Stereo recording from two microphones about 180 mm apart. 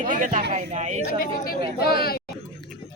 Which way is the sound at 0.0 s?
45° right (ahead or behind).